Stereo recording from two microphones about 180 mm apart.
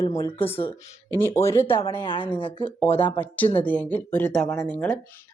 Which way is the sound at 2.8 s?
10° left (ahead or behind).